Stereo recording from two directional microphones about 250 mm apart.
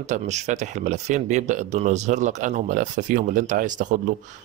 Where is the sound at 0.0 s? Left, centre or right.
Right.